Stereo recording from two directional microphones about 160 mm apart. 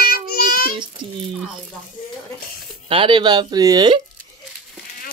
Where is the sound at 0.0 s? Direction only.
70° left (ahead or behind).